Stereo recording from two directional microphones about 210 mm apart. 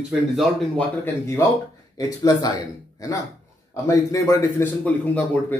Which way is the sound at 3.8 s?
15° left (ahead or behind).